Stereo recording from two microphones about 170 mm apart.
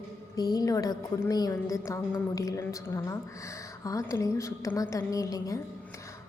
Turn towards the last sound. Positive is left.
turn(degrees=20)  # may be behind; listen again after turning